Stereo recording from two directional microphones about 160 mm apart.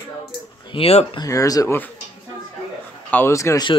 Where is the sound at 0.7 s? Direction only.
35° left (ahead or behind).